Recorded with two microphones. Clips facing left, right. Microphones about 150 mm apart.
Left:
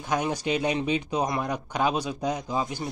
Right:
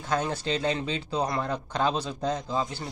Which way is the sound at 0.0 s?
15° left (ahead or behind).